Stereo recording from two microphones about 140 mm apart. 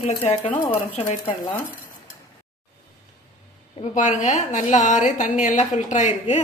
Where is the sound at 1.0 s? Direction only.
50° left (ahead or behind).